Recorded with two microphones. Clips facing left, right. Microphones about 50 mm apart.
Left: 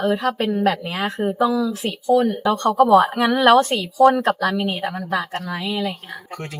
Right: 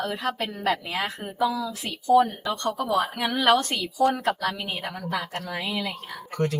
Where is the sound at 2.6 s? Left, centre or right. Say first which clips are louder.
Left 11 dB; left.